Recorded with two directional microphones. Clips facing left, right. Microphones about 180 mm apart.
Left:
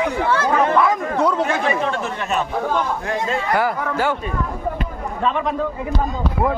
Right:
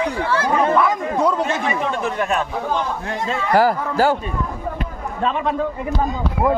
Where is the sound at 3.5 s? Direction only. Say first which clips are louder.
Right 6 dB; 35° right (ahead or behind).